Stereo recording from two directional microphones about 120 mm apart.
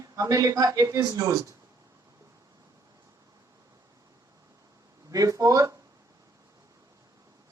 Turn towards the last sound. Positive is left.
turn(degrees=-30)  # may be behind; listen again after turning